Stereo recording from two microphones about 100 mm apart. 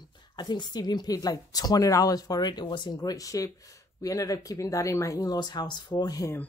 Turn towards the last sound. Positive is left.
turn(degrees=45)  # may be behind; listen again after turning